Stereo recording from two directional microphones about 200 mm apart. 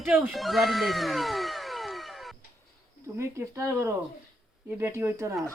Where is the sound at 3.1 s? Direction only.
15° right (ahead or behind).